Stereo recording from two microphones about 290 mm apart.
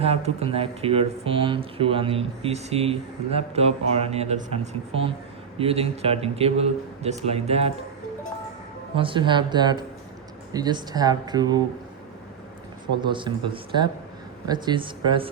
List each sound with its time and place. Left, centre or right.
0.0 s speech: right
9.0 s speech: centre
13.0 s speech: centre